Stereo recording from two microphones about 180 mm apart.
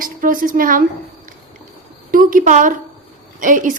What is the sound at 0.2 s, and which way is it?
Speech, 50° right (ahead or behind).